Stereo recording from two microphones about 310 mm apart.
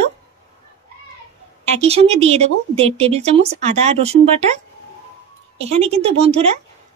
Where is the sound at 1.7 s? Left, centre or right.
Right.